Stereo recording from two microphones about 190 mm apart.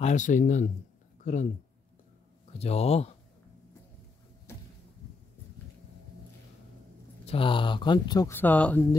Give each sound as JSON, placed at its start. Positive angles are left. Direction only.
{"t": 0.0, "sound": "a man's voice", "side_deg": 40}
{"t": 2.6, "sound": "a man's voice", "side_deg": 35}
{"t": 7.2, "sound": "speech", "side_deg": 25}
{"t": 8.4, "sound": "speech", "side_deg": 10}